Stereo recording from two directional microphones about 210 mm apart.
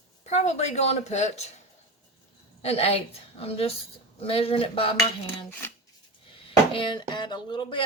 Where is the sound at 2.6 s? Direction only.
30° left (ahead or behind).